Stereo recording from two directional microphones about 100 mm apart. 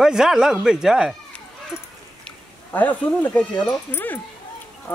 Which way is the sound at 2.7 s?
15° left (ahead or behind).